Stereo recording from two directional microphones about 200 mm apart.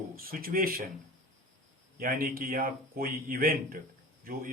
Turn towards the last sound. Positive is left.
turn(degrees=-45)  # may be behind; listen again after turning